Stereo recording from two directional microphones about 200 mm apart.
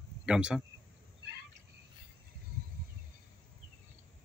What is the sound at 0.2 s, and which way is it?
Speech, 5° right (ahead or behind).